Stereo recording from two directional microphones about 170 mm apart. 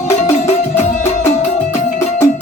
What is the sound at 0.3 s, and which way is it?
Music, 45° left (ahead or behind).